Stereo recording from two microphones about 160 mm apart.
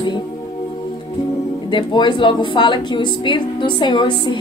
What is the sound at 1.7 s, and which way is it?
A woman's voice, 30° left (ahead or behind).